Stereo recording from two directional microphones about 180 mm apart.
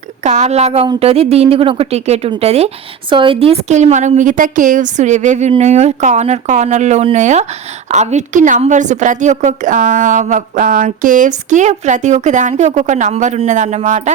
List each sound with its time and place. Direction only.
0.3 s a woman's voice: 40° right (ahead or behind)